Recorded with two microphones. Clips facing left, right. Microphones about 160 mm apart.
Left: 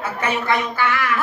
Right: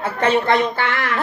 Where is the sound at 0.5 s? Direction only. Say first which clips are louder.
Right 2 dB; 60° right (ahead or behind).